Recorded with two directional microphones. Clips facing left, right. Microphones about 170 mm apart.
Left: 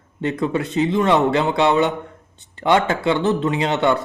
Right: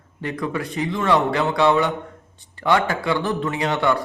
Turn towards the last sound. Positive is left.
turn(degrees=25)  # may be behind; listen again after turning